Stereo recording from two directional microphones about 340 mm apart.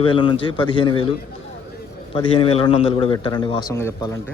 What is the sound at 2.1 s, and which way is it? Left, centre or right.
A man's voice, centre.